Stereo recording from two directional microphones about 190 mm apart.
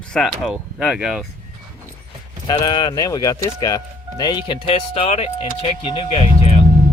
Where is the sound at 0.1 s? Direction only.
Centre (ahead or behind).